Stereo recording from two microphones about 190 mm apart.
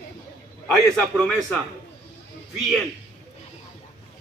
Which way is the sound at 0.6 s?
5° left (ahead or behind).